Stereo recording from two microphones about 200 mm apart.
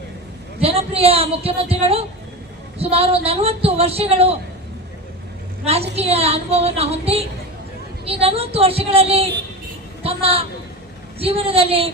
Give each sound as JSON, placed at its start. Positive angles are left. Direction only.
{"t": 0.6, "sound": "a woman's voice", "side_deg": -30}
{"t": 5.6, "sound": "a woman's voice", "side_deg": -30}